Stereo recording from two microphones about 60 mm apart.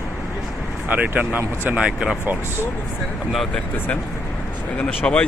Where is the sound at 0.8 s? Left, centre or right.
Right.